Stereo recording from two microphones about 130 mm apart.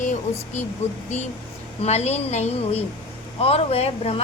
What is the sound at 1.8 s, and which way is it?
A woman's voice, 55° left (ahead or behind).